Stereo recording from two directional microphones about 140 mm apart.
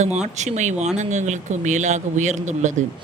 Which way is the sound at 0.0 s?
55° right (ahead or behind).